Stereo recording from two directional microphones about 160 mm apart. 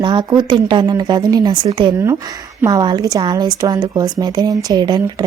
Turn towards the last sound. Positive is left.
turn(degrees=-25)  # may be behind; listen again after turning